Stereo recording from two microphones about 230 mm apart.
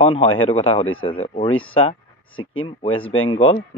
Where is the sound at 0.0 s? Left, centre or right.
Left.